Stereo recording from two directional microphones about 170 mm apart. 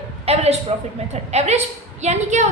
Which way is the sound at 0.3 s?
40° right (ahead or behind).